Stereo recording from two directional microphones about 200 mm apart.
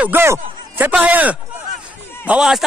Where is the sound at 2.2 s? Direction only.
5° right (ahead or behind).